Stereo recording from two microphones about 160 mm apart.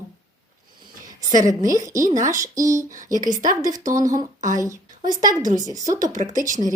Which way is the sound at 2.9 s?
55° right (ahead or behind).